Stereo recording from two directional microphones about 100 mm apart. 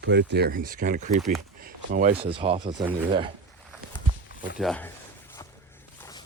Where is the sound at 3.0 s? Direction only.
55° right (ahead or behind).